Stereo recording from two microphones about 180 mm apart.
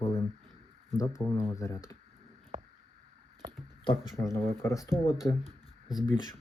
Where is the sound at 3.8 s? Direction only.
20° left (ahead or behind).